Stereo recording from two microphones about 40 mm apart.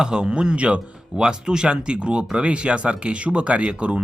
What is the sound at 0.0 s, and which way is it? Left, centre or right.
Speech, right.